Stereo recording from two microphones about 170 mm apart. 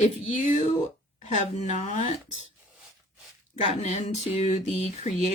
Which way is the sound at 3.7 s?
35° left (ahead or behind).